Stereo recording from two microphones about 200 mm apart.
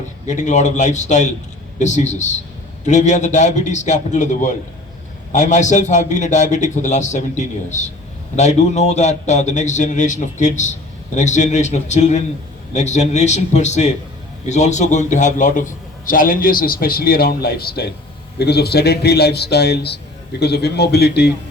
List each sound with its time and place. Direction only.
0.3 s a man's voice: 35° left (ahead or behind); by 21.3 s 55° left (ahead or behind)